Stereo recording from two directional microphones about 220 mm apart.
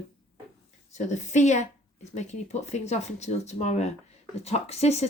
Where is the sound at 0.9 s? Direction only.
35° left (ahead or behind).